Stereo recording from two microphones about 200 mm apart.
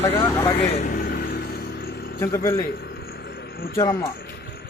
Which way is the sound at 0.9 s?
45° left (ahead or behind).